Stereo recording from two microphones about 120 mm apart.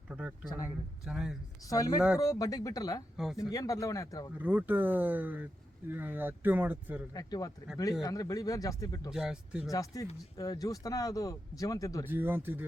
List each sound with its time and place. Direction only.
0.1 s speech: 10° right (ahead or behind)
0.4 s speech: 30° left (ahead or behind)
1.0 s speech: 5° right (ahead or behind)
1.6 s speech: 30° left (ahead or behind)
4.4 s speech: 15° right (ahead or behind)
7.1 s speech: 30° left (ahead or behind)
9.0 s speech: 5° right (ahead or behind)
9.6 s speech: 30° left (ahead or behind)
12.0 s speech: 15° right (ahead or behind)